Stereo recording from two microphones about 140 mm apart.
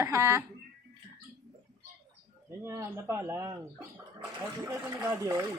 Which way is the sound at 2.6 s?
20° right (ahead or behind).